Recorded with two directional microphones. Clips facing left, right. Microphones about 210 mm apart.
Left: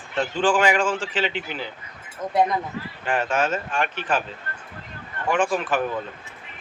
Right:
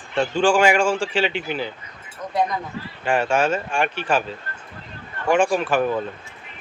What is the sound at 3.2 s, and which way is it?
Speech, 10° right (ahead or behind).